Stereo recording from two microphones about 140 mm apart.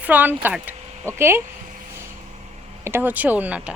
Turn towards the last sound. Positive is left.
turn(degrees=-10)  # may be behind; listen again after turning